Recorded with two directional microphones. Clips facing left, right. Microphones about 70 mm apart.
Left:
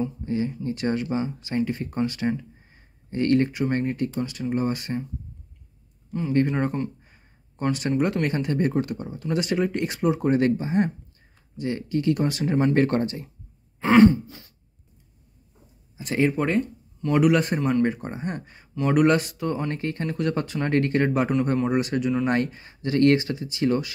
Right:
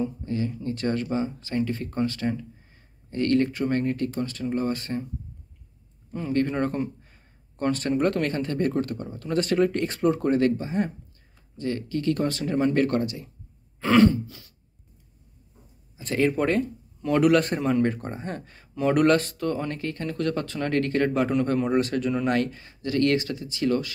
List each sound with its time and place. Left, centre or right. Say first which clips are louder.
0.2 s speech: left 2 dB; left
6.3 s speech: left 2 dB; centre
7.0 s a sound: even; centre
7.6 s speech: even; centre
8.3 s speech: left 1 dB; centre
10.3 s speech: left 1 dB; left
13.7 s throat clearing: left 3 dB; left
16.0 s speech: left 1 dB; centre
16.3 s speech: even; centre
18.8 s speech: left 1 dB; centre
19.0 s speech: even; centre